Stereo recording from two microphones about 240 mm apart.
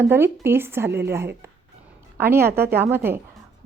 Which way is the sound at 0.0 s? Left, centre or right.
Centre.